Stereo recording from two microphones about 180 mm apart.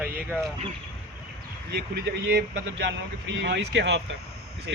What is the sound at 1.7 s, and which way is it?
Speech, 60° right (ahead or behind).